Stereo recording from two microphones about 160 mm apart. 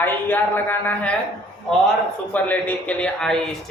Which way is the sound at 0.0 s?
10° left (ahead or behind).